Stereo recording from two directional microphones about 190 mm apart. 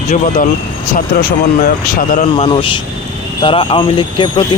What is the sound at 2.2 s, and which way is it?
Speech, 30° left (ahead or behind).